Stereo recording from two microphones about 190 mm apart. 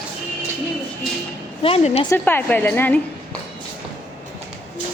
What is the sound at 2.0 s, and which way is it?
Speech, 10° left (ahead or behind).